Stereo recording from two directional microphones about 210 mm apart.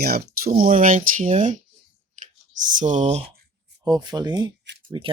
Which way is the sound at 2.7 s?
35° right (ahead or behind).